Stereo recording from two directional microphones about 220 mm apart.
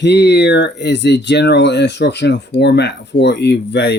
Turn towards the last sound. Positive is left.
turn(degrees=50)  # may be behind; listen again after turning